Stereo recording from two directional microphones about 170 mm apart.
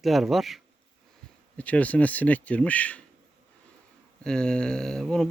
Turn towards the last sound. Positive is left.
turn(degrees=5)  # may be behind; listen again after turning